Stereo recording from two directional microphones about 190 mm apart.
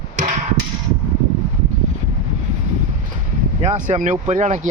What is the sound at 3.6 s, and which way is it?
Speech, 40° right (ahead or behind).